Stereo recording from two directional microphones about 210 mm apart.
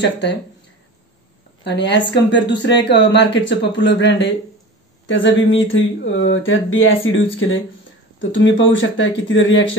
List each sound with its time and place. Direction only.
0.0 s speech: 55° left (ahead or behind)
1.6 s speech: 55° left (ahead or behind)